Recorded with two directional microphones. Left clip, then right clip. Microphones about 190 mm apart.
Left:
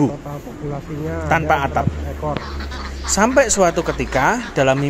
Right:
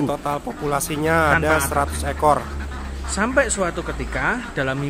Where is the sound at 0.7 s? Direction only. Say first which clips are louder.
Right 8 dB; 25° right (ahead or behind).